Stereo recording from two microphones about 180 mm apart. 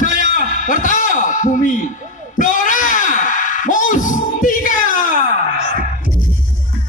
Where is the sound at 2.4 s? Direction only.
45° left (ahead or behind).